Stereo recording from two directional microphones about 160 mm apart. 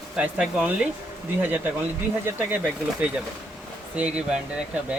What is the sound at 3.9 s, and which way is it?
Speech, 10° right (ahead or behind).